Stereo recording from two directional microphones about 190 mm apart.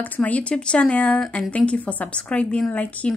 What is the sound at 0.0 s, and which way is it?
Speech, 10° left (ahead or behind).